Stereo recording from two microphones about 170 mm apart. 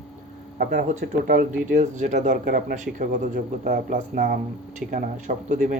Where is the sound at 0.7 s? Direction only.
45° right (ahead or behind).